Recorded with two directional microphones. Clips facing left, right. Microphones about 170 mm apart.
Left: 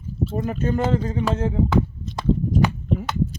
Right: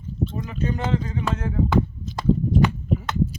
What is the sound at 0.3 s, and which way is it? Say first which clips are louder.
Speech: left 7 dB; 45° left (ahead or behind).